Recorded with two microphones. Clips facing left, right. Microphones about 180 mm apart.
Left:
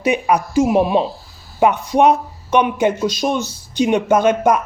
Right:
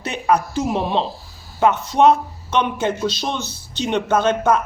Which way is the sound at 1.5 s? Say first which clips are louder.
Left 2 dB; 15° left (ahead or behind).